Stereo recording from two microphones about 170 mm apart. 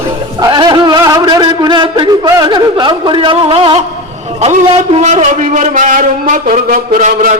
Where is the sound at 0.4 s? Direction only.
25° right (ahead or behind).